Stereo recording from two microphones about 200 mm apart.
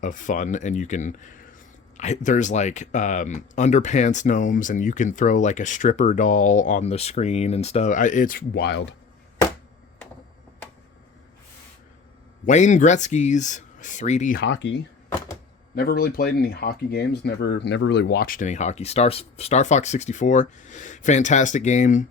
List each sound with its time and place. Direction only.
0.0 s speech: 40° left (ahead or behind); by 9.0 s 55° left (ahead or behind)
12.5 s speech: 40° left (ahead or behind)
14.4 s speech: 65° left (ahead or behind)
15.7 s speech: 50° left (ahead or behind)